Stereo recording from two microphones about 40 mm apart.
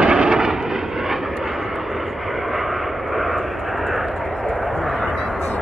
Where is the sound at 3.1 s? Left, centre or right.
Centre.